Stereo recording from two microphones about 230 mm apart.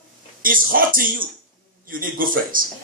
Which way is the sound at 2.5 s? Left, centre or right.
Right.